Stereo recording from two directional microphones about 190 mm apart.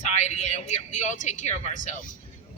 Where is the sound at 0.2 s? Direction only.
35° left (ahead or behind).